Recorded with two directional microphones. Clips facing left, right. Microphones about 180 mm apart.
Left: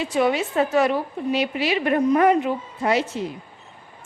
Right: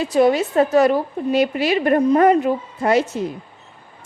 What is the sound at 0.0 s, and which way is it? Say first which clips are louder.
A woman's voice: right 5 dB; 40° right (ahead or behind).